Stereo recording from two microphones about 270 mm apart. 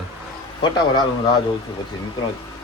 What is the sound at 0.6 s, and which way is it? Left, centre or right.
Speech, centre.